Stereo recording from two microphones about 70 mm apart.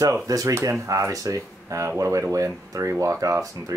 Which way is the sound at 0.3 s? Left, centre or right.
Right.